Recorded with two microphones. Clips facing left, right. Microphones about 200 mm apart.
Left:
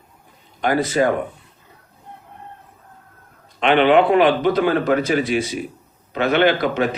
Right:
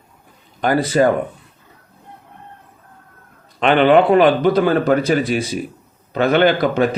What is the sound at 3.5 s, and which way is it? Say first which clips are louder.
A man's voice: right 2 dB; 40° right (ahead or behind).